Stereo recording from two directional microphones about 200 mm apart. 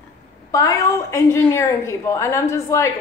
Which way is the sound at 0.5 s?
15° left (ahead or behind).